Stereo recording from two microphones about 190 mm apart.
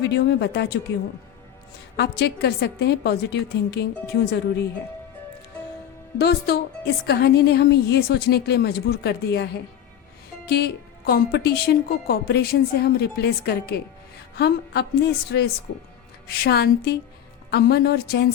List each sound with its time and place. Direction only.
0.0 s a woman's voice: 60° left (ahead or behind)
2.0 s a woman's voice: 60° left (ahead or behind)
6.1 s a woman's voice: 60° left (ahead or behind)